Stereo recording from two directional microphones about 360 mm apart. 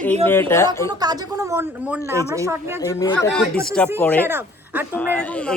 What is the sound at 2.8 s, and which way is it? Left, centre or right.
Speech, centre.